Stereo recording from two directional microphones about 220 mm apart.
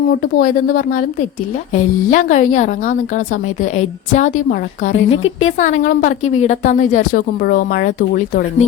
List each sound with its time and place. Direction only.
0.3 s speech: 40° left (ahead or behind)
5.1 s speech: 65° left (ahead or behind)
5.5 s speech: 35° left (ahead or behind)